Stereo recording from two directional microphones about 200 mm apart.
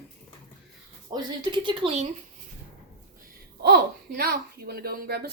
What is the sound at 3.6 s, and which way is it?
Speech, 50° right (ahead or behind).